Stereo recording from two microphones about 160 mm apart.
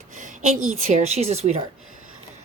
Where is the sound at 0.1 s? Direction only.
50° right (ahead or behind).